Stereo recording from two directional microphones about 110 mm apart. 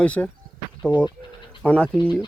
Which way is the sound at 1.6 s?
10° left (ahead or behind).